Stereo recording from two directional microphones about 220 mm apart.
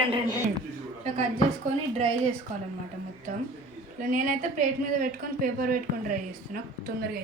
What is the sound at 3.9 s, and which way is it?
Speech, 35° right (ahead or behind).